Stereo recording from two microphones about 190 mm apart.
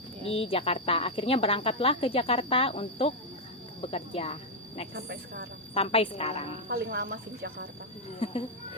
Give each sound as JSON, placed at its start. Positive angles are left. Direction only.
{"t": 0.3, "sound": "a woman's voice", "side_deg": 30}
{"t": 4.9, "sound": "speech", "side_deg": -55}
{"t": 5.7, "sound": "a woman's voice", "side_deg": 30}
{"t": 6.7, "sound": "speech", "side_deg": -55}
{"t": 8.2, "sound": "speech", "side_deg": 30}